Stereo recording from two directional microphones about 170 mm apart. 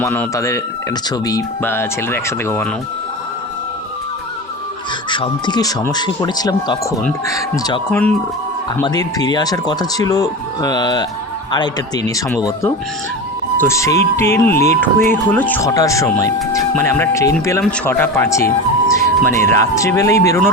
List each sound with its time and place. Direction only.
0.0 s speech: 15° left (ahead or behind)
5.0 s speech: 30° left (ahead or behind)
7.9 s speech: 10° left (ahead or behind)
8.8 s speech: 20° left (ahead or behind)
13.6 s speech: 15° left (ahead or behind)